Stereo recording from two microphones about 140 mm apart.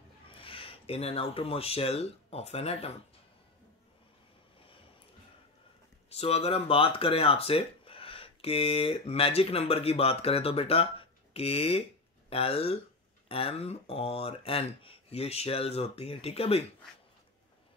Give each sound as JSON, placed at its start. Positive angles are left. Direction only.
{"t": 0.3, "sound": "speech", "side_deg": 40}
{"t": 6.1, "sound": "speech", "side_deg": 45}